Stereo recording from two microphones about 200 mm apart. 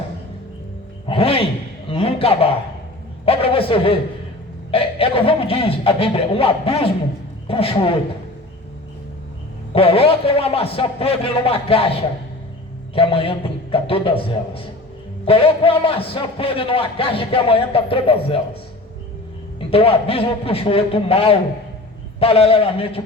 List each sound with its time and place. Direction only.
1.0 s music: 30° left (ahead or behind)
1.9 s a sound: 25° left (ahead or behind)
3.2 s a man's voice: 25° left (ahead or behind)
9.7 s a man's voice: 30° left (ahead or behind)
12.9 s a man's voice: 25° left (ahead or behind)
19.5 s a man's voice: 30° left (ahead or behind)